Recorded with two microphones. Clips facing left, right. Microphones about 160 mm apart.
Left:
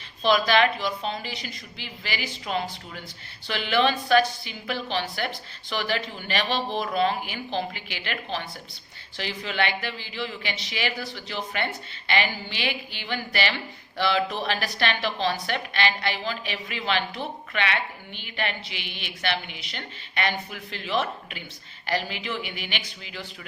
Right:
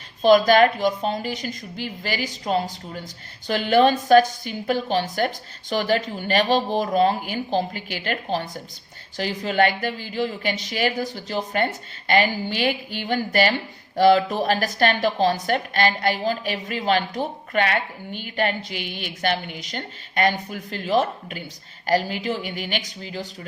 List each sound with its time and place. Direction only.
0.2 s a woman's voice: 45° right (ahead or behind)